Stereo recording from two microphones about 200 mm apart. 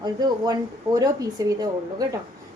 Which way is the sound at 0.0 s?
20° right (ahead or behind).